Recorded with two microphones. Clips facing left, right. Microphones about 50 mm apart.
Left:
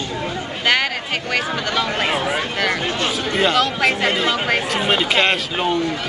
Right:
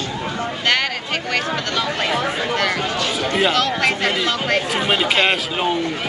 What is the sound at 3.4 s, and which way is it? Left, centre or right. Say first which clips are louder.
Speech: left 1 dB; centre.